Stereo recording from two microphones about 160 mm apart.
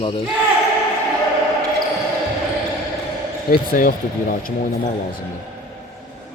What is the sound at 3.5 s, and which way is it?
Speech, 65° left (ahead or behind).